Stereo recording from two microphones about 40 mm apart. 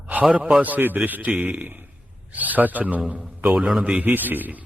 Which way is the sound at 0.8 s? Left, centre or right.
Right.